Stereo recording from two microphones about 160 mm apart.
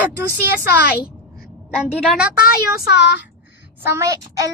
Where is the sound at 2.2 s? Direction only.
70° left (ahead or behind); by 3.2 s 90° left.